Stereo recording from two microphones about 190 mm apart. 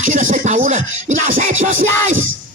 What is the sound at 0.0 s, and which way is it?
Music, 45° right (ahead or behind).